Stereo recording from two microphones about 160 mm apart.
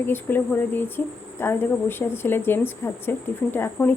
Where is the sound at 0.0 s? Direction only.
10° left (ahead or behind).